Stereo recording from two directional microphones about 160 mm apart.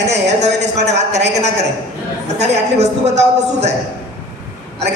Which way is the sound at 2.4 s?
45° right (ahead or behind).